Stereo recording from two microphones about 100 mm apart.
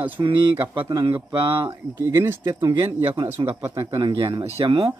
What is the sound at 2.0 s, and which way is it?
Speech, 25° right (ahead or behind).